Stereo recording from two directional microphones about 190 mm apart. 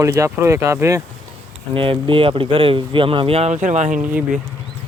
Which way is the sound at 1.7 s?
25° right (ahead or behind).